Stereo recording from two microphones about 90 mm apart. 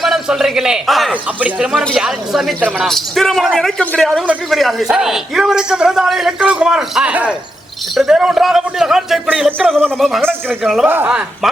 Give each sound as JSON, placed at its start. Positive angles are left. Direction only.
{"t": 0.0, "sound": "a man's voice", "side_deg": 0}
{"t": 1.4, "sound": "a man's voice", "side_deg": -10}
{"t": 2.6, "sound": "a man's voice", "side_deg": -15}
{"t": 2.8, "sound": "a man's voice", "side_deg": 0}
{"t": 7.9, "sound": "a man's voice", "side_deg": -5}
{"t": 10.8, "sound": "speech", "side_deg": -20}